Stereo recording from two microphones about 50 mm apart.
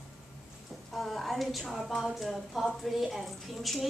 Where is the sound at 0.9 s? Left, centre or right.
Centre.